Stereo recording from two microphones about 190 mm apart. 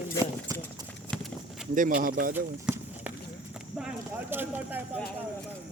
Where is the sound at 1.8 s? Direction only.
45° right (ahead or behind).